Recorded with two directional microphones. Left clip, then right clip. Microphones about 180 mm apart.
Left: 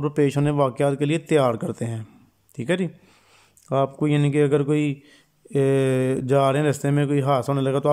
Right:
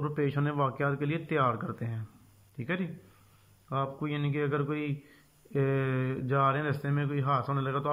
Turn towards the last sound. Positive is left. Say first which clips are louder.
# left 9 dB
turn(degrees=35)  # may be behind; listen again after turning